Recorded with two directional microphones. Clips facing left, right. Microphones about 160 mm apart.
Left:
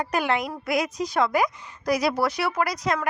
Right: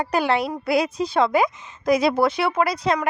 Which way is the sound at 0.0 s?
30° right (ahead or behind).